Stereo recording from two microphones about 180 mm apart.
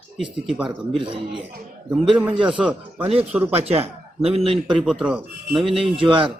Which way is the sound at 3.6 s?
35° right (ahead or behind).